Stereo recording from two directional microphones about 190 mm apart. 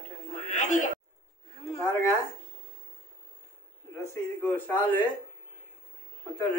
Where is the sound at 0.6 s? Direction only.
40° left (ahead or behind).